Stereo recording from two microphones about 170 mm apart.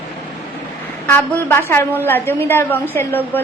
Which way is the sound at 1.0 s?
10° left (ahead or behind).